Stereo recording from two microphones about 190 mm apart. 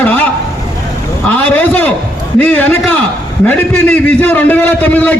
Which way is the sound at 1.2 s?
10° left (ahead or behind).